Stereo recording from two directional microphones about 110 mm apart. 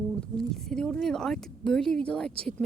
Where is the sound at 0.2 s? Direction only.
5° left (ahead or behind).